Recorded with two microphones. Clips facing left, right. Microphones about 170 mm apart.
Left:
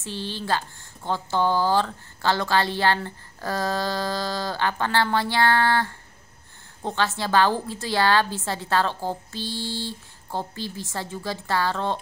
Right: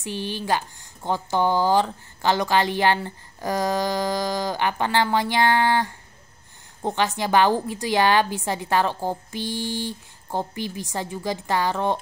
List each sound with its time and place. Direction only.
0.0 s speech: 15° right (ahead or behind)